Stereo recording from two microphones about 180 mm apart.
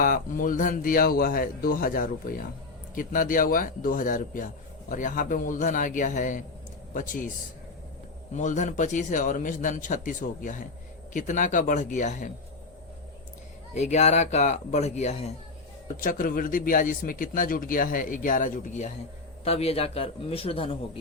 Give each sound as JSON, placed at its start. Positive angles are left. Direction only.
{"t": 0.0, "sound": "speech", "side_deg": 50}
{"t": 8.3, "sound": "speech", "side_deg": 40}
{"t": 13.7, "sound": "speech", "side_deg": 40}
{"t": 16.0, "sound": "speech", "side_deg": 50}